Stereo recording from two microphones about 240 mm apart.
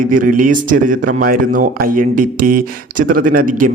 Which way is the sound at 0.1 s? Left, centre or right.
Right.